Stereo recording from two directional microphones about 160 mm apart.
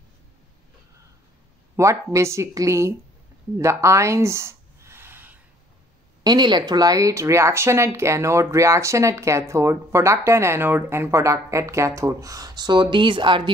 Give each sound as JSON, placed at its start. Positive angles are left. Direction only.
{"t": 1.8, "sound": "speech", "side_deg": -20}
{"t": 3.5, "sound": "a sound", "side_deg": -20}
{"t": 6.2, "sound": "speech", "side_deg": -25}